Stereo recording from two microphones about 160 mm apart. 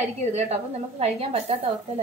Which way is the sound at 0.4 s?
40° right (ahead or behind).